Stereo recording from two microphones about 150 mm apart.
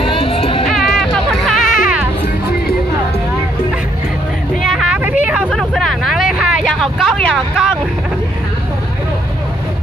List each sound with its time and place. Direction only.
0.0 s music: 35° left (ahead or behind)
0.7 s music: centre (ahead or behind)
4.6 s vehicle: centre (ahead or behind)
5.5 s vehicle: 5° left (ahead or behind)